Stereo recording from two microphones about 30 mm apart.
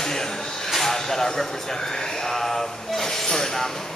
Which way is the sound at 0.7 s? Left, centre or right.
Centre.